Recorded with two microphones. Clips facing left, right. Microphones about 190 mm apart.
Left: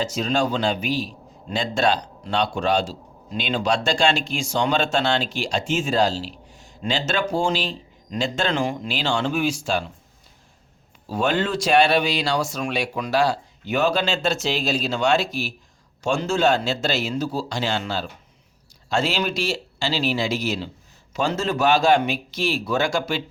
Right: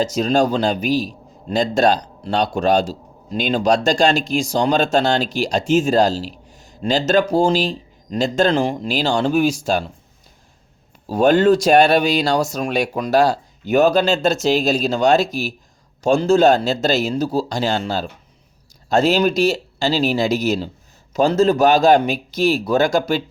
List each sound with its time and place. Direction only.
0.0 s a man's voice: 40° right (ahead or behind)
11.0 s a man's voice: 40° right (ahead or behind)